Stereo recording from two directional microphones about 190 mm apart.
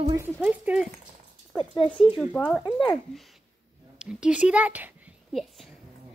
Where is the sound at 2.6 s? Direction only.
25° left (ahead or behind).